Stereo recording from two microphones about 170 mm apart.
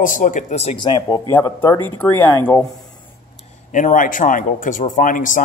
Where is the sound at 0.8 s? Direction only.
25° left (ahead or behind).